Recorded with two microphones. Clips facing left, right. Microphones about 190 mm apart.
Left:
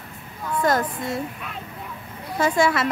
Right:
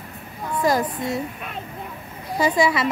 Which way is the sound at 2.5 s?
Centre (ahead or behind).